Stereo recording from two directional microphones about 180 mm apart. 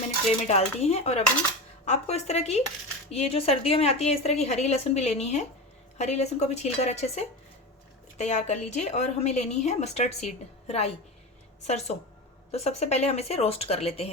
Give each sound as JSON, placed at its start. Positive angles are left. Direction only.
{"t": 0.3, "sound": "a woman's voice", "side_deg": 35}